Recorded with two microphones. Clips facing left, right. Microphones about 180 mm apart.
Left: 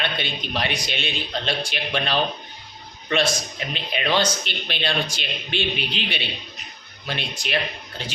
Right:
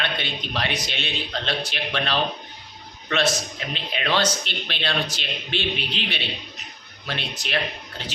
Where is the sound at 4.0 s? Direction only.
25° left (ahead or behind).